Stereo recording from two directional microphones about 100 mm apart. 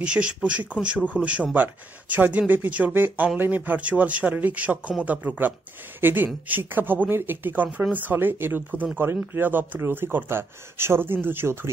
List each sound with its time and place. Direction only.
0.0 s speech: 10° right (ahead or behind)